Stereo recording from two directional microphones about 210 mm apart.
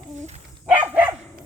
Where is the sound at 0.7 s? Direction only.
5° right (ahead or behind).